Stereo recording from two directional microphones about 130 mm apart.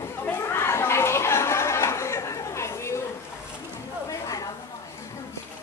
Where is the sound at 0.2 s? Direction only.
15° left (ahead or behind).